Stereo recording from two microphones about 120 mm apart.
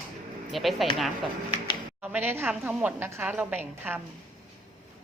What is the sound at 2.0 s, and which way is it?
Speech, 15° right (ahead or behind).